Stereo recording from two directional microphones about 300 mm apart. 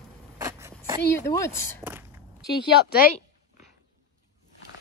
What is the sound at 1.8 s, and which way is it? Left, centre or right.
Biting, centre.